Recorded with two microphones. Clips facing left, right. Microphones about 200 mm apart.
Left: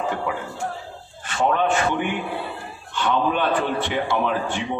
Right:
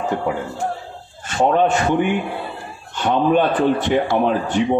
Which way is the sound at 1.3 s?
40° right (ahead or behind).